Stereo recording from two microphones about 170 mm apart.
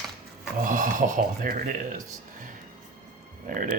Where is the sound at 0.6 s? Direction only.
50° right (ahead or behind).